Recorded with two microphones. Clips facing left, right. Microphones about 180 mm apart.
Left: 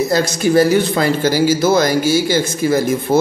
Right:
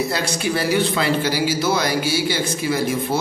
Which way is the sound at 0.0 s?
40° left (ahead or behind).